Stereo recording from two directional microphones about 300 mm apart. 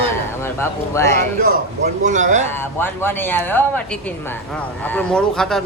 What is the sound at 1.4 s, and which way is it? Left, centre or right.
Speech, right.